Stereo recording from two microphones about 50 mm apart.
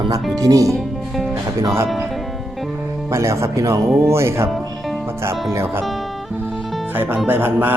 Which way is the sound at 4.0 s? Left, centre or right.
Right.